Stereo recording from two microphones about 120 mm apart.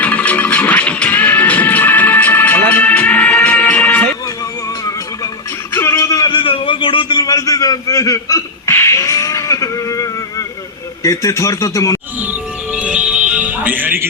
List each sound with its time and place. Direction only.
0.0 s music: 10° left (ahead or behind)
5.7 s music: 20° left (ahead or behind)
6.3 s a sound: 45° left (ahead or behind); by 10.4 s 30° left (ahead or behind)
11.0 s speech: 25° left (ahead or behind)
12.7 s music: 10° right (ahead or behind)